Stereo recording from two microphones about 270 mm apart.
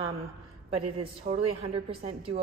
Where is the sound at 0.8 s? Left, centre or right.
Centre.